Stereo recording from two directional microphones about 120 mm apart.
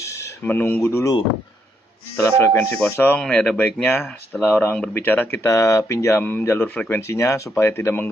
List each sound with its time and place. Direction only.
0.0 s a sound: 25° left (ahead or behind)
0.5 s speech: 15° left (ahead or behind)
2.1 s speech: 25° left (ahead or behind)
3.2 s speech: 5° left (ahead or behind)